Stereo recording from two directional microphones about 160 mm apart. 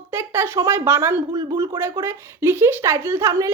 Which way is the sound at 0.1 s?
15° right (ahead or behind).